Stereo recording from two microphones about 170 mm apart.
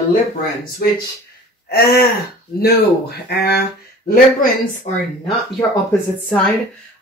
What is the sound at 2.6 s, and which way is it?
Speech, 70° left (ahead or behind).